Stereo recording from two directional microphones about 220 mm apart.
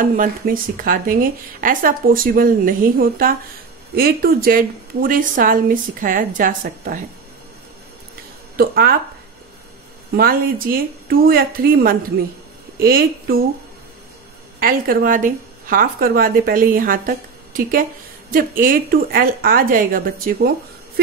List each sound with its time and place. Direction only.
0.0 s speech: 40° right (ahead or behind)
8.5 s speech: 45° right (ahead or behind)
10.1 s a woman's voice: 40° right (ahead or behind)
14.6 s speech: 40° right (ahead or behind)